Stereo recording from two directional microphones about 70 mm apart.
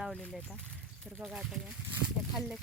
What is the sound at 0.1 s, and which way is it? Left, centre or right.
Speech, centre.